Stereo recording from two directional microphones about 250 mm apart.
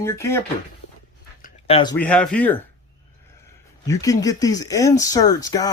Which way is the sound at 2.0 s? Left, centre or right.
Centre.